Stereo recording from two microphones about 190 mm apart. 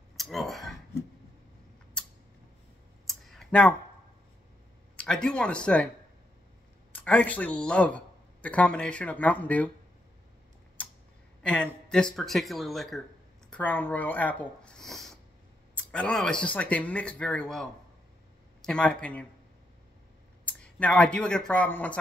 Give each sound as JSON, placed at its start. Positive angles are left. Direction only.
{"t": 0.2, "sound": "speech", "side_deg": 0}
{"t": 3.1, "sound": "a sound", "side_deg": 0}
{"t": 4.9, "sound": "speech", "side_deg": 5}
{"t": 7.0, "sound": "speech", "side_deg": 5}
{"t": 11.4, "sound": "speech", "side_deg": 5}
{"t": 20.4, "sound": "speech", "side_deg": 5}